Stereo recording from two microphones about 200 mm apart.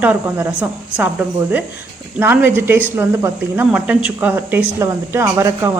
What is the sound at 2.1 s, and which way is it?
Speech, 10° right (ahead or behind).